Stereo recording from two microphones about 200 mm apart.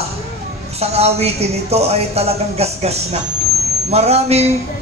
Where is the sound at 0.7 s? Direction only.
30° right (ahead or behind).